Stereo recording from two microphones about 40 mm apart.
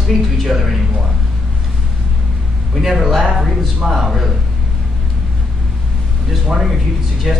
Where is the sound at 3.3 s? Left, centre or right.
Centre.